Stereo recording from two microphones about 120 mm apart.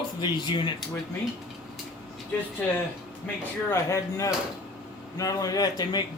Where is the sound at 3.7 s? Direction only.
25° left (ahead or behind).